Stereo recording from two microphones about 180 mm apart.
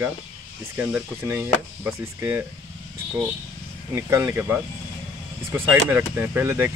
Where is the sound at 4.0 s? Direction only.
15° right (ahead or behind).